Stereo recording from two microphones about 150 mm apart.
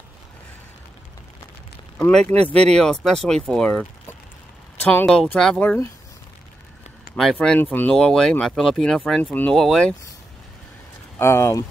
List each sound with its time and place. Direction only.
2.0 s speech: 10° left (ahead or behind)
4.8 s speech: 10° left (ahead or behind)
7.2 s speech: 5° left (ahead or behind)
11.1 s speech: 15° left (ahead or behind)